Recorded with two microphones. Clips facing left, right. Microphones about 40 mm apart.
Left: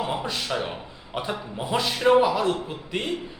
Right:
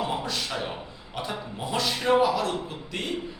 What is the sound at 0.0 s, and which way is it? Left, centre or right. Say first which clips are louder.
A man's voice: left 1 dB; centre.